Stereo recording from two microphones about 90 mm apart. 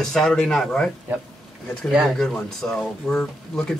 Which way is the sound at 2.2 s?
5° left (ahead or behind).